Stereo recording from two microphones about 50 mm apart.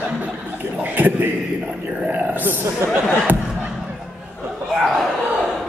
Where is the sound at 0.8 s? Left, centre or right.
Right.